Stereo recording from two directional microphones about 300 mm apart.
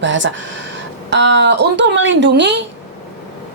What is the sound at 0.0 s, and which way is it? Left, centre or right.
Speech, right.